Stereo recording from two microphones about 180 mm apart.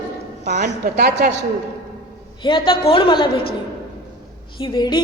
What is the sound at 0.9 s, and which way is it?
Speech, 65° right (ahead or behind).